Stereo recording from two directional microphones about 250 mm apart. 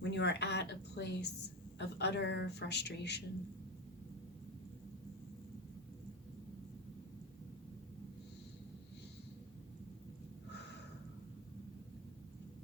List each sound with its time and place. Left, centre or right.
0.0 s a man's voice: left